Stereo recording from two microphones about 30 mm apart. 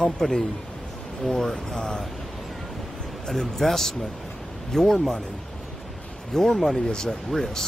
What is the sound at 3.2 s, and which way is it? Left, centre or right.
Speech, centre.